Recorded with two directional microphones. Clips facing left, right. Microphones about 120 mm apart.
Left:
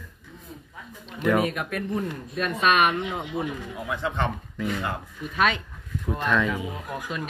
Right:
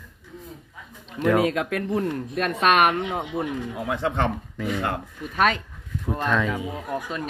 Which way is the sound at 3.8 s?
70° right (ahead or behind).